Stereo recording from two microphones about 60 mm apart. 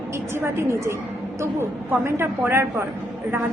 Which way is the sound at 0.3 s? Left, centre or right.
Right.